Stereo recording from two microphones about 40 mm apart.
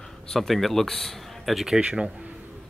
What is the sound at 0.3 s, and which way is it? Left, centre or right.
A man's voice, centre.